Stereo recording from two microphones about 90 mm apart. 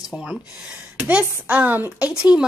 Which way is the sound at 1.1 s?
15° right (ahead or behind).